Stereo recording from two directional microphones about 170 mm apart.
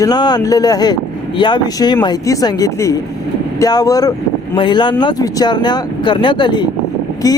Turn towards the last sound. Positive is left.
turn(degrees=20)  # may be behind; listen again after turning